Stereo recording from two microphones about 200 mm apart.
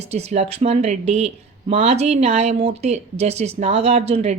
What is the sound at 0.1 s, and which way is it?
Speech, 35° right (ahead or behind).